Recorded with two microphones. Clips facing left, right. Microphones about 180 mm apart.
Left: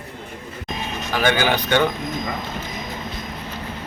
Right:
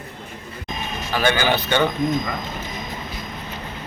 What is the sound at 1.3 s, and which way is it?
Speech, 10° left (ahead or behind).